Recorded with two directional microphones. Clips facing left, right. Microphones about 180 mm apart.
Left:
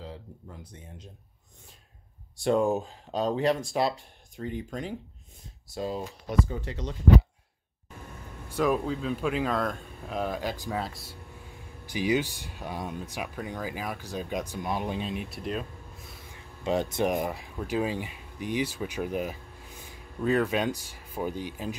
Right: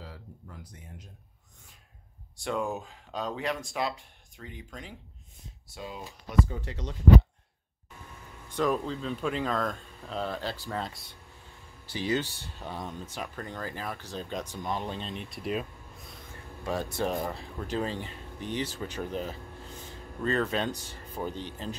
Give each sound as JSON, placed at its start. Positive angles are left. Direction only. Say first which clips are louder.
{"t": 2.4, "sound": "speech", "louder": "left 7 dB", "side_deg": 30}
{"t": 8.5, "sound": "speech", "louder": "left 2 dB", "side_deg": 10}
{"t": 11.8, "sound": "speech", "louder": "left 3 dB", "side_deg": 15}
{"t": 16.6, "sound": "speech", "louder": "left 4 dB", "side_deg": 20}